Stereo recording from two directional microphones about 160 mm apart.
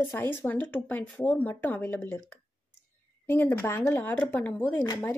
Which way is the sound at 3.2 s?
15° left (ahead or behind).